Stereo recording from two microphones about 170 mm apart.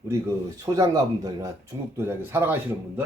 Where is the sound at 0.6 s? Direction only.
20° right (ahead or behind).